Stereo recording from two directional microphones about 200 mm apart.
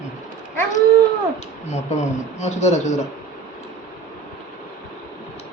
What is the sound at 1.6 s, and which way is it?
Speech, 35° left (ahead or behind).